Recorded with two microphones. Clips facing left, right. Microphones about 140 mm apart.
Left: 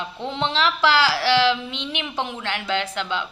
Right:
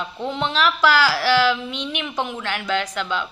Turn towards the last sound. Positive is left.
turn(degrees=25)  # may be behind; listen again after turning